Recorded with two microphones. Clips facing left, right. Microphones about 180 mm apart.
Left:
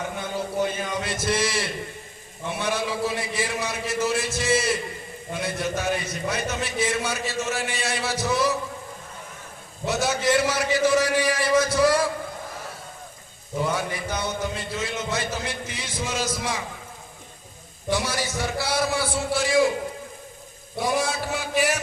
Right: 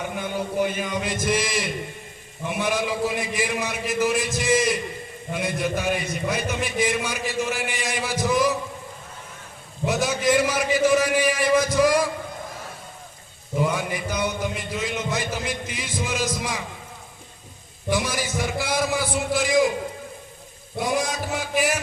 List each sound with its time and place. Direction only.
0.3 s a man's voice: 15° right (ahead or behind)
9.8 s a man's voice: 15° right (ahead or behind)
13.6 s a man's voice: 15° right (ahead or behind)
17.8 s a man's voice: 15° right (ahead or behind)
20.7 s a man's voice: 15° right (ahead or behind)